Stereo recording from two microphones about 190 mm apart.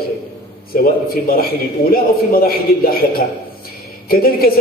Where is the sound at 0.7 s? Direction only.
50° left (ahead or behind).